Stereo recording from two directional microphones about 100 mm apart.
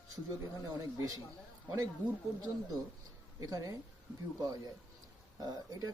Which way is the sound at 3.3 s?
35° right (ahead or behind).